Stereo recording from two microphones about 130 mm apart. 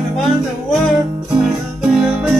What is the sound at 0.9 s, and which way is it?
Music, centre (ahead or behind).